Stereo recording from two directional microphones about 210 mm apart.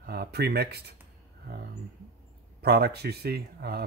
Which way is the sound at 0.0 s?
50° right (ahead or behind).